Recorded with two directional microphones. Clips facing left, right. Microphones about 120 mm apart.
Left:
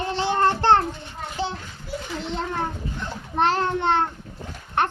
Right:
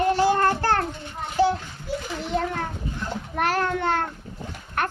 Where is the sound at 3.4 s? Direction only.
25° left (ahead or behind).